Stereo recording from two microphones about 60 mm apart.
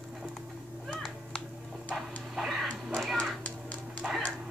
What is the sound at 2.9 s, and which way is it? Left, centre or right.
Cat, centre.